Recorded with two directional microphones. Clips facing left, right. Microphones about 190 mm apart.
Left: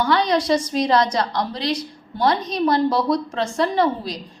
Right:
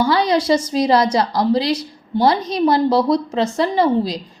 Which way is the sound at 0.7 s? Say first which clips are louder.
Right 3 dB; 30° right (ahead or behind).